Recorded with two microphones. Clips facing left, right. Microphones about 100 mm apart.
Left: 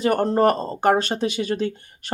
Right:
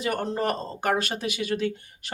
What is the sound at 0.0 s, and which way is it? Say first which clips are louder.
Speech: left 9 dB; 40° left (ahead or behind).